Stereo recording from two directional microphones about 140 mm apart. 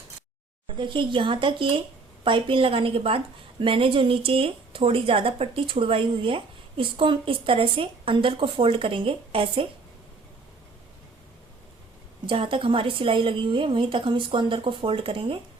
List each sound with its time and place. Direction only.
0.8 s speech: 35° right (ahead or behind)
12.2 s speech: 40° right (ahead or behind)